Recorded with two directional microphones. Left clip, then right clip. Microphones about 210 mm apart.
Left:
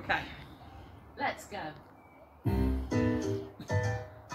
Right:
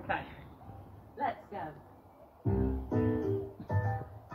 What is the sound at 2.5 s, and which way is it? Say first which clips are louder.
Music: left 1 dB; 30° left (ahead or behind).